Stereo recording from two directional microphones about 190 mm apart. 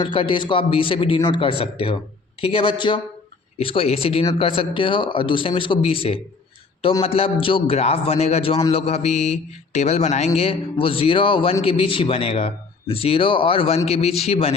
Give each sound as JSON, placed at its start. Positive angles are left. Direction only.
{"t": 0.0, "sound": "a man's voice", "side_deg": 25}